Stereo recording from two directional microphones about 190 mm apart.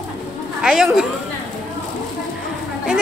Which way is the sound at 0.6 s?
5° right (ahead or behind).